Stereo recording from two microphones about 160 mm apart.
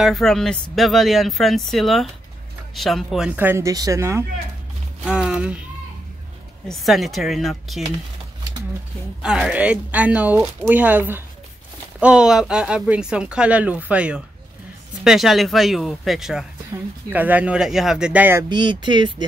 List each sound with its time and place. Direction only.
0.0 s speech: centre (ahead or behind); by 4.2 s 20° right (ahead or behind)
5.0 s music: 5° right (ahead or behind)
6.7 s speech: centre (ahead or behind)
9.2 s speech: 5° right (ahead or behind)
18.5 s speech: 30° right (ahead or behind)